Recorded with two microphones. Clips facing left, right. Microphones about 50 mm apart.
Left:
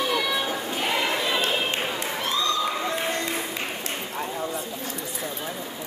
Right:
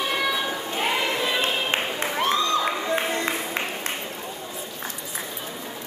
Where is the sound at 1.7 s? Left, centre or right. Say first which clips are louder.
Right 2 dB; right.